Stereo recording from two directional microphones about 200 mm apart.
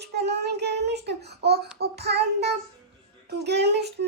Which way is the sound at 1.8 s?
55° right (ahead or behind).